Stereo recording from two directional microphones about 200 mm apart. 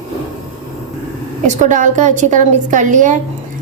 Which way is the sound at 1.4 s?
40° right (ahead or behind).